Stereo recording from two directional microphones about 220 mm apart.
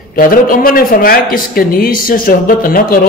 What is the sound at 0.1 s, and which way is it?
A man's voice, 40° left (ahead or behind).